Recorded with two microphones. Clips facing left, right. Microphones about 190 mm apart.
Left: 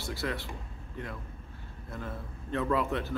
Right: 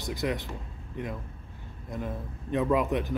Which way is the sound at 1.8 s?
15° right (ahead or behind).